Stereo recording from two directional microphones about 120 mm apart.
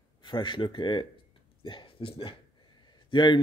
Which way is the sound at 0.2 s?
40° left (ahead or behind).